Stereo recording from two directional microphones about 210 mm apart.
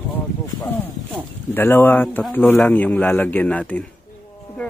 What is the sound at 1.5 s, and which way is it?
Speech, 10° left (ahead or behind).